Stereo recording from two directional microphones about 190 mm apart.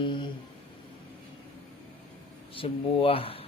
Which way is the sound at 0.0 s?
25° left (ahead or behind).